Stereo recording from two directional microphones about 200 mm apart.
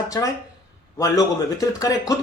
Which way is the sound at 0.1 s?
15° left (ahead or behind).